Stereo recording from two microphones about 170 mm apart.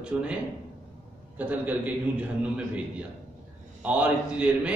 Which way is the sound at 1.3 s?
10° right (ahead or behind).